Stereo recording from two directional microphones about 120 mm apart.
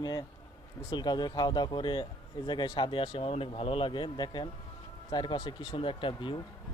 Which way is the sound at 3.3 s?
55° left (ahead or behind).